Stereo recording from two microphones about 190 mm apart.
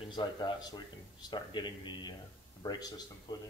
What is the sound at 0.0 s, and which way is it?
Speech, 25° left (ahead or behind).